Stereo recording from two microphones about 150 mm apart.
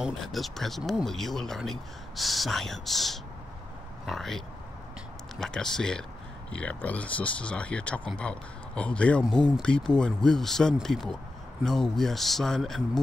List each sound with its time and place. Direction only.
0.0 s speech: centre (ahead or behind)
5.4 s speech: 5° left (ahead or behind)